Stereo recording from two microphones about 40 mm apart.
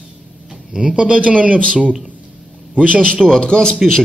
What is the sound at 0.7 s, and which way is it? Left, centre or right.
Speech, right.